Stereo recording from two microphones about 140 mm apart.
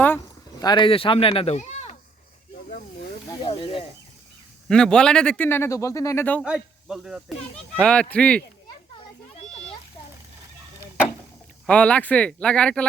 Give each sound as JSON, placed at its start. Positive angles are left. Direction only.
{"t": 0.6, "sound": "a man's voice", "side_deg": 35}
{"t": 3.4, "sound": "speech", "side_deg": 35}
{"t": 4.7, "sound": "a child's voice", "side_deg": 5}
{"t": 6.4, "sound": "a child's voice", "side_deg": -5}
{"t": 9.3, "sound": "a sound", "side_deg": 50}
{"t": 11.6, "sound": "a child's voice", "side_deg": 10}